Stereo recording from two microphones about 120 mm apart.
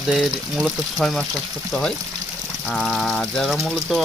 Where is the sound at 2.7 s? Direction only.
5° left (ahead or behind).